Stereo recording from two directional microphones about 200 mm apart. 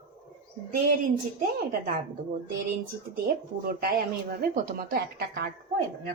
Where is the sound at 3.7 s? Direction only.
50° right (ahead or behind).